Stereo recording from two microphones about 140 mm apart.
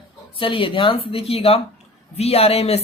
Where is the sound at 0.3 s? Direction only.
40° left (ahead or behind).